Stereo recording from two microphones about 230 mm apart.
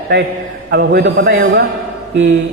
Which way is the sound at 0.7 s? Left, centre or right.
Right.